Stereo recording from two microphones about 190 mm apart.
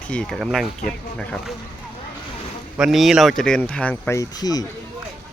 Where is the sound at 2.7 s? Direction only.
Centre (ahead or behind); by 4.6 s 20° left (ahead or behind).